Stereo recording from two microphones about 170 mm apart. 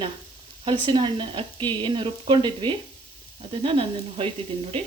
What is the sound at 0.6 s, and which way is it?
A woman's voice, 30° right (ahead or behind).